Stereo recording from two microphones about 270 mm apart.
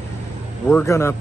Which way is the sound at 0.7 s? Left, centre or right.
Centre.